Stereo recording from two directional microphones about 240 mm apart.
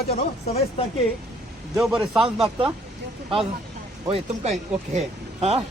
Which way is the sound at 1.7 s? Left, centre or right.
Centre.